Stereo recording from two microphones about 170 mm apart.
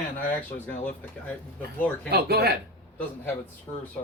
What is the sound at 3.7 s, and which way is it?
Speech, 15° left (ahead or behind).